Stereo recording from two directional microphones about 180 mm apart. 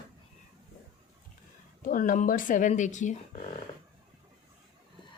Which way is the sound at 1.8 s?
50° left (ahead or behind).